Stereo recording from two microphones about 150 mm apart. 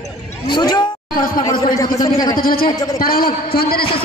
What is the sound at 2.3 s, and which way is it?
A man's voice, 75° left (ahead or behind).